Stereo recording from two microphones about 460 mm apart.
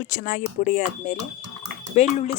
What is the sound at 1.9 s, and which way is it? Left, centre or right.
Speech, centre.